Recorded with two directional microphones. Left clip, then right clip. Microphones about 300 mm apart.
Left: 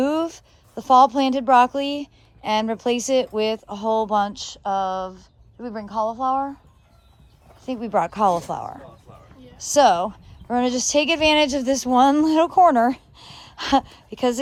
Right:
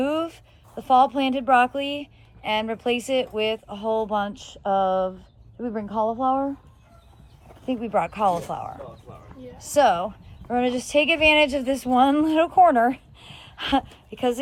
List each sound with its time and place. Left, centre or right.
0.0 s speech: centre
7.6 s speech: left
7.9 s speech: centre
8.2 s speech: left
9.6 s a woman's voice: centre